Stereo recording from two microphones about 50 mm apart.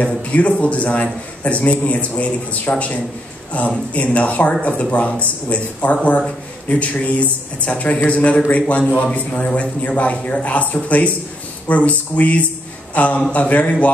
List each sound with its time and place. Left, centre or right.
0.0 s a man's voice: left